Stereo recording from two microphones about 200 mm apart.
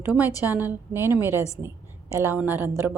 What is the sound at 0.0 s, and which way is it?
A woman's voice, 10° right (ahead or behind).